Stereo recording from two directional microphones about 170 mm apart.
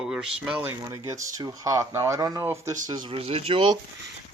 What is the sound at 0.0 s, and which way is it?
Speech, 5° right (ahead or behind).